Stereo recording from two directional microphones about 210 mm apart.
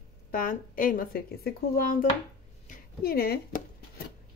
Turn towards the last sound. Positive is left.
turn(degrees=45)  # may be behind; listen again after turning